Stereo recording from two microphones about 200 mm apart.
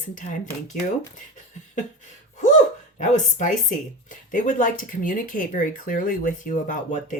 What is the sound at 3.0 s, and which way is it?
Speech, 35° left (ahead or behind).